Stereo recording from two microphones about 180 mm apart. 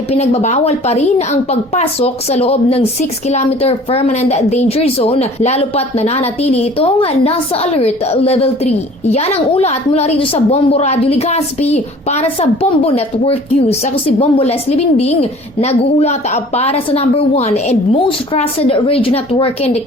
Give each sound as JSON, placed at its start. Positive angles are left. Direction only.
{"t": 0.1, "sound": "a woman's voice", "side_deg": 40}